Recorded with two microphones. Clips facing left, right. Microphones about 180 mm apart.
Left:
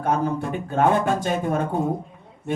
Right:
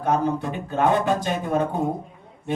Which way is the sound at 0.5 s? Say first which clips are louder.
Left 2 dB; 50° left (ahead or behind).